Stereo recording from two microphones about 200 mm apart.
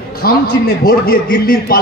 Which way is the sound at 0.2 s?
50° left (ahead or behind).